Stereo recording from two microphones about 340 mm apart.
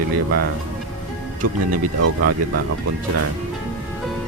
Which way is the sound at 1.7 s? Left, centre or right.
Right.